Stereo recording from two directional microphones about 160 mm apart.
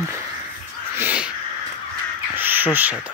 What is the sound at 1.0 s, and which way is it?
Crow, 10° right (ahead or behind).